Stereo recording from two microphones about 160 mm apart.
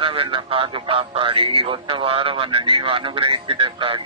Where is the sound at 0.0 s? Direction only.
35° right (ahead or behind).